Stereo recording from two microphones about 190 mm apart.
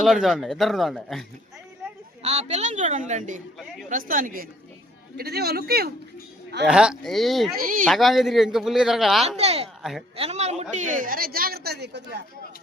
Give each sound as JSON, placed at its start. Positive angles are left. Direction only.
{"t": 0.0, "sound": "speech", "side_deg": 0}
{"t": 2.2, "sound": "a woman's voice", "side_deg": -35}
{"t": 6.7, "sound": "speech", "side_deg": -5}
{"t": 7.6, "sound": "a woman's voice", "side_deg": -50}
{"t": 7.9, "sound": "speech", "side_deg": 0}
{"t": 9.2, "sound": "a woman's voice", "side_deg": -35}